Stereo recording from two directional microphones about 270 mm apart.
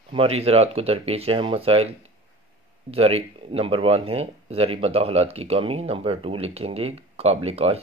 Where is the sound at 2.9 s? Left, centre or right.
Right.